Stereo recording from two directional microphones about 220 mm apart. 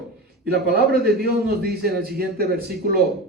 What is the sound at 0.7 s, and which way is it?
Speech, 45° right (ahead or behind).